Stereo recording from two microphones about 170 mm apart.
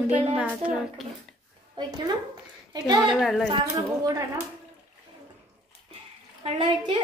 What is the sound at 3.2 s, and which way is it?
Speech, centre (ahead or behind).